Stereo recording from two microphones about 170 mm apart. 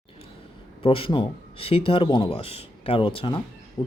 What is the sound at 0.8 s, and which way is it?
Speech, 30° left (ahead or behind).